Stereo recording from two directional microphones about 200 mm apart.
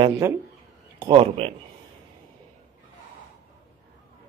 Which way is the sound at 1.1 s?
30° right (ahead or behind).